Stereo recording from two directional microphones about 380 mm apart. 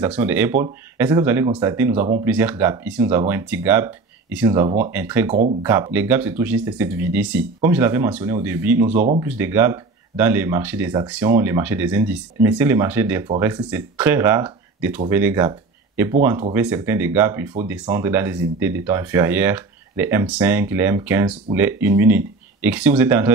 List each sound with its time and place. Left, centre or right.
0.0 s speech: centre
5.3 s speech: centre
5.7 s speech: centre